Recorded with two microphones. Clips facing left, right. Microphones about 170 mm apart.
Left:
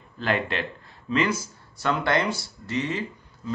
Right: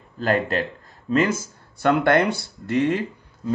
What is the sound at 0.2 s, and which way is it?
Speech, 40° right (ahead or behind).